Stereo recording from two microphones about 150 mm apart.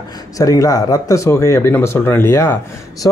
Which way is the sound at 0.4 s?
25° left (ahead or behind).